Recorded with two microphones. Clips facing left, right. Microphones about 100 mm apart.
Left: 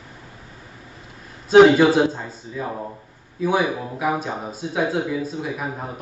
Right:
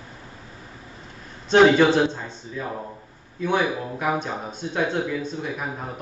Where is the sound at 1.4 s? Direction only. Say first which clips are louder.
Left 4 dB; 5° left (ahead or behind).